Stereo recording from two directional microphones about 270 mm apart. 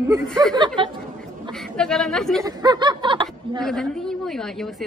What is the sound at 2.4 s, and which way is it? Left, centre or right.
Speech, centre.